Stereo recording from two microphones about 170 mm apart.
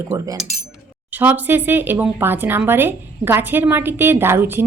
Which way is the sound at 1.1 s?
10° right (ahead or behind).